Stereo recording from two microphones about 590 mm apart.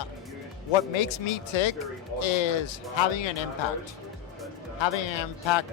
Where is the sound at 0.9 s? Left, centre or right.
Left.